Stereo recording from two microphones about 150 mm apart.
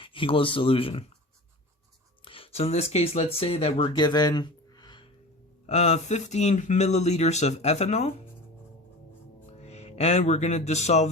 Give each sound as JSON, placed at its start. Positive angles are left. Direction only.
{"t": 0.0, "sound": "speech", "side_deg": 35}
{"t": 2.2, "sound": "speech", "side_deg": 40}
{"t": 5.6, "sound": "speech", "side_deg": 45}
{"t": 9.5, "sound": "speech", "side_deg": 45}